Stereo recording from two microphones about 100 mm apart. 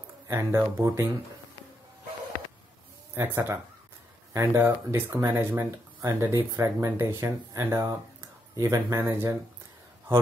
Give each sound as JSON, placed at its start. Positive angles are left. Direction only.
{"t": 0.3, "sound": "speech", "side_deg": -25}
{"t": 3.2, "sound": "speech", "side_deg": -25}